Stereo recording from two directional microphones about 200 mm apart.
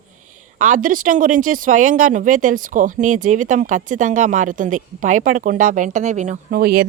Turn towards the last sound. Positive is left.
turn(degrees=-35)  # may be behind; listen again after turning